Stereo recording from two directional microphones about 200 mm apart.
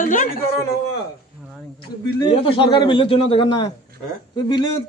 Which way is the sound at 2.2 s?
25° left (ahead or behind).